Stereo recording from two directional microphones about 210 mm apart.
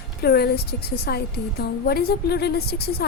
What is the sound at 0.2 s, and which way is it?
A woman's voice, 50° left (ahead or behind).